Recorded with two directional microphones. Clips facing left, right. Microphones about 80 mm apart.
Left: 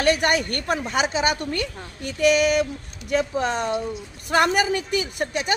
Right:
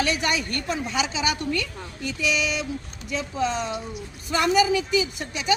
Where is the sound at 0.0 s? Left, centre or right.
Left.